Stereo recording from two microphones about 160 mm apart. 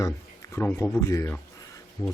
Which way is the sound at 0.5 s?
15° left (ahead or behind).